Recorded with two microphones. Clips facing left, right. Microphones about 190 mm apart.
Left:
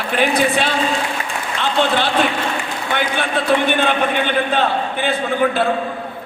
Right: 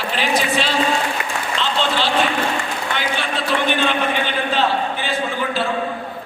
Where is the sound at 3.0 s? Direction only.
55° left (ahead or behind).